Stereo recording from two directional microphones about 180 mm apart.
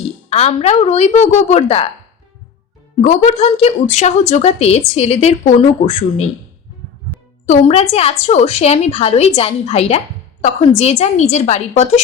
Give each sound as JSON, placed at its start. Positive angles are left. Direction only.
{"t": 0.3, "sound": "a woman's voice", "side_deg": 35}
{"t": 3.0, "sound": "a woman's voice", "side_deg": 40}
{"t": 7.4, "sound": "a woman's voice", "side_deg": 40}